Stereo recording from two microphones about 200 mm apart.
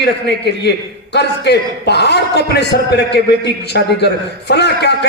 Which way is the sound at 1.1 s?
55° left (ahead or behind).